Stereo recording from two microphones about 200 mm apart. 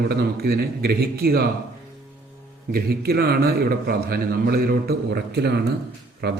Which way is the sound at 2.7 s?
50° right (ahead or behind).